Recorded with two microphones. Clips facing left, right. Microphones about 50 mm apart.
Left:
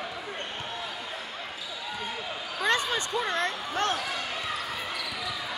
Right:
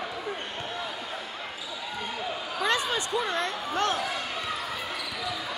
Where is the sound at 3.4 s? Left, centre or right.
Left.